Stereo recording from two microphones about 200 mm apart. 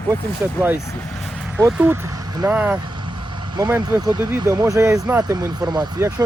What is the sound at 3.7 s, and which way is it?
Speech, 20° right (ahead or behind).